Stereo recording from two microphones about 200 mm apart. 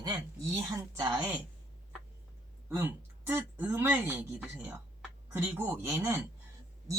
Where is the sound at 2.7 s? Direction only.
10° right (ahead or behind).